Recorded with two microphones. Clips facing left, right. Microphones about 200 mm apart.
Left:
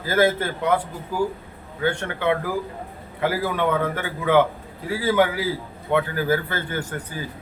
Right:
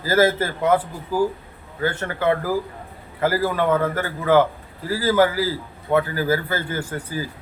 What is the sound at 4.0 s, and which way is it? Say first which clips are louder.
Speech: even; centre (ahead or behind).